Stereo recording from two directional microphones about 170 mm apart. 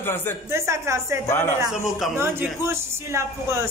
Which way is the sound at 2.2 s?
15° right (ahead or behind).